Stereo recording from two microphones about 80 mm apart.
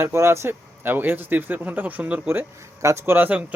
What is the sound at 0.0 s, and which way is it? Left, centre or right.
Speech, right.